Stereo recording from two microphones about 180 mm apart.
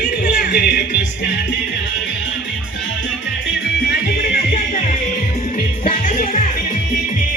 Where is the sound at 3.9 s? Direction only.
55° left (ahead or behind).